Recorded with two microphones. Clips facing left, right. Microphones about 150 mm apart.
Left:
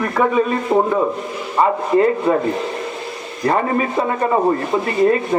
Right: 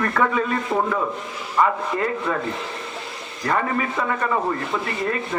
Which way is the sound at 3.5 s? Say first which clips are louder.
Left 5 dB; 30° left (ahead or behind).